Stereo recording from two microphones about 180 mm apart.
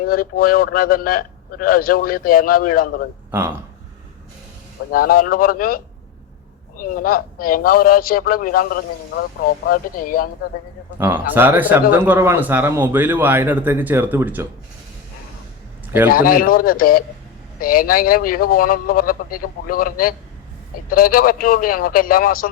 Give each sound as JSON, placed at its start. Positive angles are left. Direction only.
{"t": 0.0, "sound": "a man's voice", "side_deg": 55}
{"t": 3.3, "sound": "a man's voice", "side_deg": -15}
{"t": 4.9, "sound": "a man's voice", "side_deg": 55}
{"t": 10.9, "sound": "a man's voice", "side_deg": -10}
{"t": 16.0, "sound": "a man's voice", "side_deg": 55}